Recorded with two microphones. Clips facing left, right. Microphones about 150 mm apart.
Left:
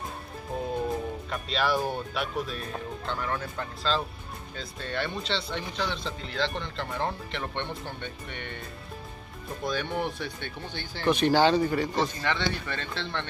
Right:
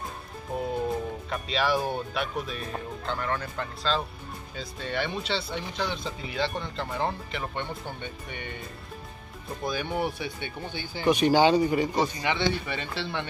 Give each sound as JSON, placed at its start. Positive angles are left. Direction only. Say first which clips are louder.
{"t": 0.8, "sound": "speech", "louder": "right 1 dB", "side_deg": 0}
{"t": 9.7, "sound": "speech", "louder": "right 1 dB", "side_deg": -10}